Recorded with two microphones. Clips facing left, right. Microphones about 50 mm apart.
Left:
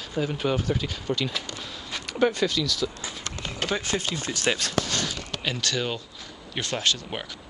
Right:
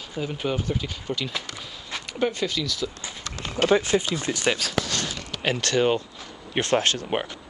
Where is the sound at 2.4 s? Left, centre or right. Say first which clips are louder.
Left 2 dB; centre.